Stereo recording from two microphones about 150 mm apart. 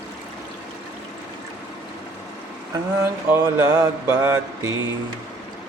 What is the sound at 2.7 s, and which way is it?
A man's voice, 20° right (ahead or behind).